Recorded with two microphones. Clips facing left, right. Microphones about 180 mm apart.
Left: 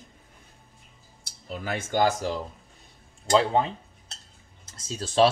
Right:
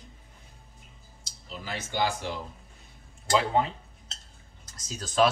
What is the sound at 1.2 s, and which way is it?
Speech, 55° left (ahead or behind).